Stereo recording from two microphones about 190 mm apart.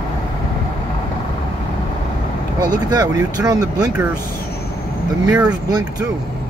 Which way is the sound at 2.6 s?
20° right (ahead or behind).